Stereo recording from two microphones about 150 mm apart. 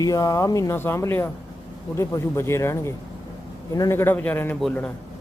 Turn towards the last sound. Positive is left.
turn(degrees=10)  # may be behind; listen again after turning